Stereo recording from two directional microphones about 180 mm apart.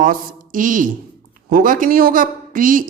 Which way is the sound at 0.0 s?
50° right (ahead or behind).